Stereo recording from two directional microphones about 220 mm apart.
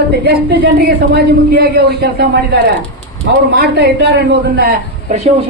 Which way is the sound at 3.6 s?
45° right (ahead or behind).